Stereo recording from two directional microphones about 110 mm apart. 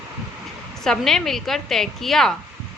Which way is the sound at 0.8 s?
5° left (ahead or behind).